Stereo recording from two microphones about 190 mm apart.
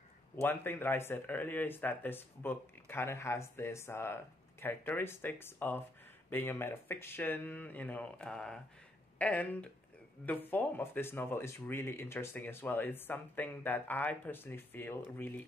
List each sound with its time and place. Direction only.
0.4 s speech: 10° left (ahead or behind)